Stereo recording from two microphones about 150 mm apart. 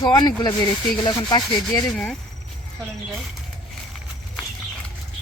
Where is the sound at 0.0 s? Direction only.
30° left (ahead or behind).